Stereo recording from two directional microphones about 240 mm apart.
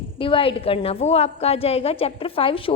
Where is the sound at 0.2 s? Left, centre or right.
Left.